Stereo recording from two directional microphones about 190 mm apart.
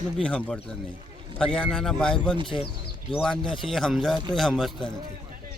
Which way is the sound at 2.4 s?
25° left (ahead or behind).